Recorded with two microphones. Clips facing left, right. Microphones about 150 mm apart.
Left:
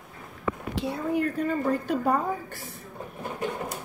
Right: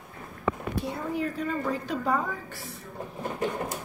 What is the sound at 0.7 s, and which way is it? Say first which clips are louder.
A woman's voice: left 3 dB; 55° left (ahead or behind).